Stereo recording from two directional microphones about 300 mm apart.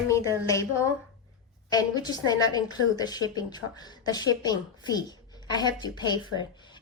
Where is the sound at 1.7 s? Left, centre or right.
Centre.